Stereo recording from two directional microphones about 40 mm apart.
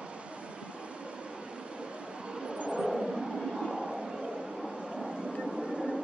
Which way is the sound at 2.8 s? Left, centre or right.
Centre.